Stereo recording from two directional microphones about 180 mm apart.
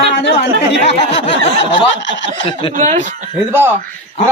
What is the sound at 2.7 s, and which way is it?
Speech, 40° right (ahead or behind).